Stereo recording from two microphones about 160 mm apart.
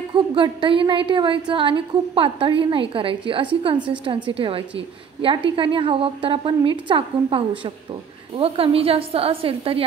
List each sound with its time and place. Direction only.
0.1 s a woman's voice: 30° right (ahead or behind)